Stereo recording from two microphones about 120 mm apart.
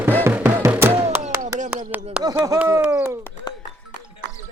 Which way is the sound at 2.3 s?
25° right (ahead or behind).